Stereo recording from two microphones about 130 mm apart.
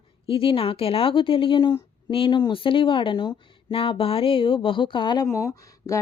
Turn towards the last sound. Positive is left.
turn(degrees=25)  # may be behind; listen again after turning